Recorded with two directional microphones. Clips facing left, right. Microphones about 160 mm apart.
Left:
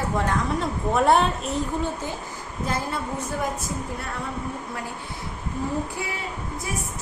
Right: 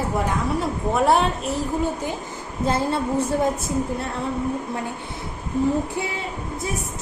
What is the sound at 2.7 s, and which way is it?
Speech, 30° right (ahead or behind).